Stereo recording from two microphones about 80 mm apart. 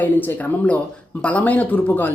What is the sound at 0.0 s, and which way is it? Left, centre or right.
Speech, left.